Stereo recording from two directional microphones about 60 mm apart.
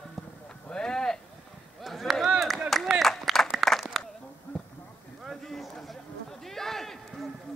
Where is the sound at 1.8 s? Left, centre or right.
Centre.